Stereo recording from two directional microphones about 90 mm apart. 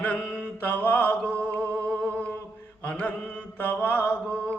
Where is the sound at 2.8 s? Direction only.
15° left (ahead or behind).